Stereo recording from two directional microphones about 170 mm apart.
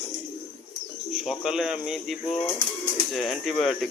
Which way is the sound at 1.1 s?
Centre (ahead or behind).